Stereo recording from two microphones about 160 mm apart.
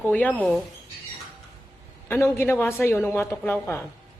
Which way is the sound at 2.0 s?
15° left (ahead or behind).